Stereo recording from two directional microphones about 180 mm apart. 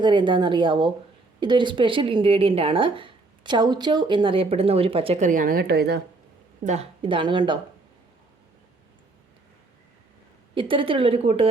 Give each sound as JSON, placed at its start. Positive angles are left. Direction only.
{"t": 0.0, "sound": "speech", "side_deg": -25}
{"t": 6.7, "sound": "speech", "side_deg": -35}
{"t": 10.5, "sound": "speech", "side_deg": -30}